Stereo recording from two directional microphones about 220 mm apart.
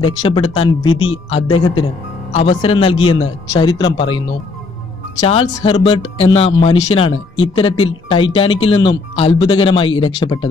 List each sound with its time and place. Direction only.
0.2 s speech: 20° left (ahead or behind)
5.2 s speech: 25° left (ahead or behind)